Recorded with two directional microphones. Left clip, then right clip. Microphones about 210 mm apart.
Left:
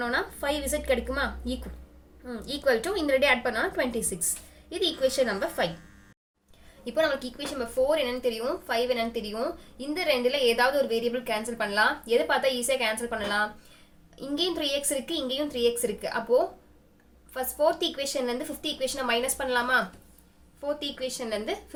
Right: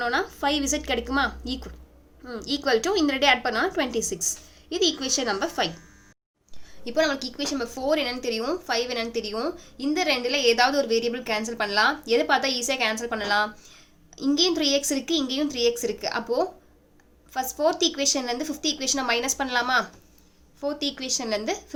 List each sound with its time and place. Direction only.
0.0 s a woman's voice: 50° right (ahead or behind)
6.8 s a woman's voice: 50° right (ahead or behind)